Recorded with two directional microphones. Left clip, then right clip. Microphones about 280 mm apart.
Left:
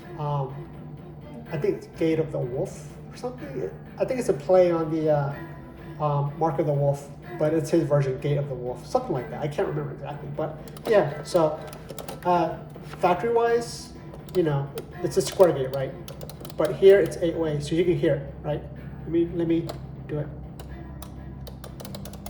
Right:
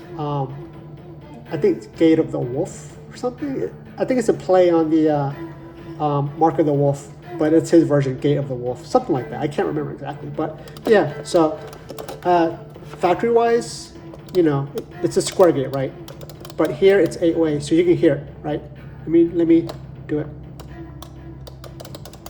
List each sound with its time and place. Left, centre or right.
0.2 s music: right
1.5 s speech: right
3.9 s speech: right
11.9 s typing: right
13.0 s speech: right